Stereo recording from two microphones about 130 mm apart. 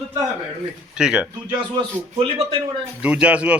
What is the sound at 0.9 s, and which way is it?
Speech, 5° right (ahead or behind).